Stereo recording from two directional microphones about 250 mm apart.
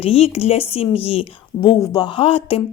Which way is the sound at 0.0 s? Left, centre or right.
Left.